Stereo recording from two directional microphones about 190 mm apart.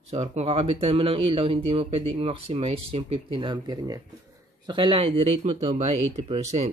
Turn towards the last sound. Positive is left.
turn(degrees=-35)  # may be behind; listen again after turning